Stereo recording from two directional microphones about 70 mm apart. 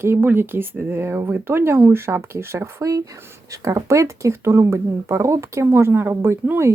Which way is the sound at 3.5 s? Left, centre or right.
Right.